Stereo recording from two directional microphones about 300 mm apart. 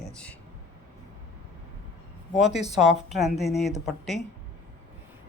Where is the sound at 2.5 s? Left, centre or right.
Left.